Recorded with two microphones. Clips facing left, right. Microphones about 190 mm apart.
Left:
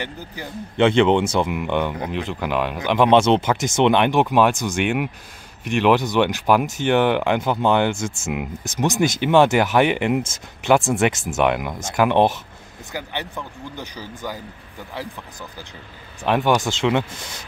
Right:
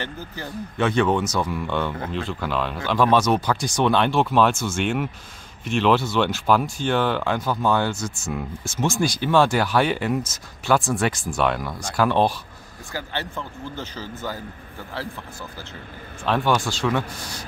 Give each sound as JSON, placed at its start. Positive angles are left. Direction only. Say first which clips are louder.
{"t": 0.7, "sound": "speech", "louder": "left 5 dB", "side_deg": 25}
{"t": 1.5, "sound": "speech", "louder": "left 3 dB", "side_deg": 15}
{"t": 16.3, "sound": "speech", "louder": "left 3 dB", "side_deg": 15}